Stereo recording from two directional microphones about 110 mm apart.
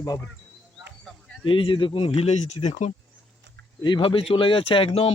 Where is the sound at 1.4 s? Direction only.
50° left (ahead or behind); by 2.7 s 75° left (ahead or behind).